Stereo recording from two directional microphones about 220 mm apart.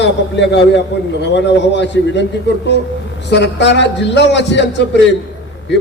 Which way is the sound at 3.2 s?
50° left (ahead or behind).